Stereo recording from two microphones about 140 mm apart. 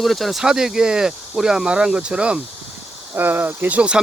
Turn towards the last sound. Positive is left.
turn(degrees=-10)  # may be behind; listen again after turning